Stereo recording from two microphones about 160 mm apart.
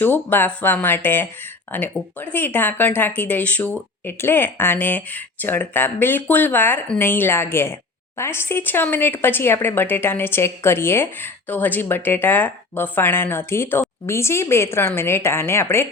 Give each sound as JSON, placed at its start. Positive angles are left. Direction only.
{"t": 0.0, "sound": "speech", "side_deg": 10}